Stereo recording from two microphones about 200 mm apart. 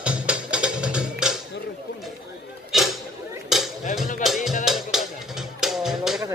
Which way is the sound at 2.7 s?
Centre (ahead or behind).